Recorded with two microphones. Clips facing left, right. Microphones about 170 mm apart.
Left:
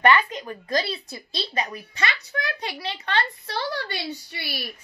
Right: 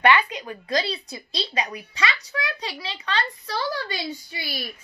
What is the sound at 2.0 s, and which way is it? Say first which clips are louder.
A child's voice: right 1 dB; 55° left (ahead or behind).